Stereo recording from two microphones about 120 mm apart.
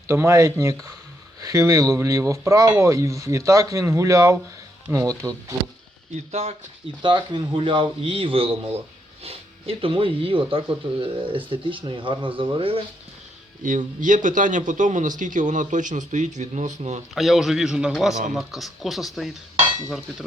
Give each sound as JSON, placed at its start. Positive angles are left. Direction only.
{"t": 0.1, "sound": "speech", "side_deg": -25}
{"t": 6.3, "sound": "speech", "side_deg": -60}
{"t": 7.0, "sound": "a man's voice", "side_deg": -40}
{"t": 13.6, "sound": "a man's voice", "side_deg": -90}
{"t": 17.2, "sound": "speech", "side_deg": 0}